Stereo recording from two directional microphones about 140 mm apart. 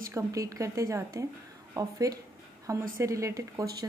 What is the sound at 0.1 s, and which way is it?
A woman's voice, 25° right (ahead or behind).